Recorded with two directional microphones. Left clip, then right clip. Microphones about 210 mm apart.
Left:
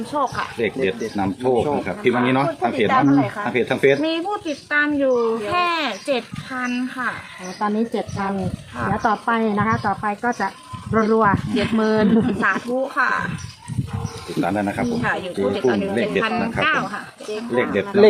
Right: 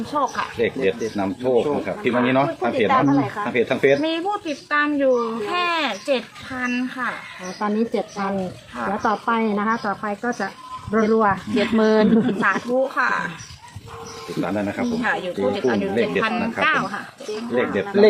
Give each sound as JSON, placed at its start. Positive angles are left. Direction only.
{"t": 0.1, "sound": "speech", "side_deg": 5}
{"t": 0.6, "sound": "speech", "side_deg": 55}
{"t": 3.1, "sound": "speech", "side_deg": 30}
{"t": 3.5, "sound": "speech", "side_deg": 55}
{"t": 4.0, "sound": "a woman's voice", "side_deg": 0}
{"t": 11.8, "sound": "speech", "side_deg": -15}
{"t": 12.4, "sound": "speech", "side_deg": 0}
{"t": 14.4, "sound": "speech", "side_deg": 55}
{"t": 15.0, "sound": "speech", "side_deg": 0}